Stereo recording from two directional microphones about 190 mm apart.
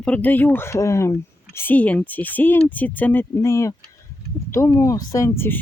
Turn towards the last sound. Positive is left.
turn(degrees=10)  # may be behind; listen again after turning